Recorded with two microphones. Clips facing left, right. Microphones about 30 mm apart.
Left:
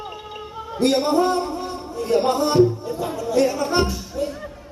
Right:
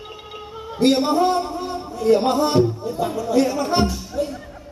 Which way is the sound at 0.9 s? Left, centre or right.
Centre.